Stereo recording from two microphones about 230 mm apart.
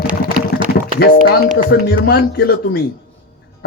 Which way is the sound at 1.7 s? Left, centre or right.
Left.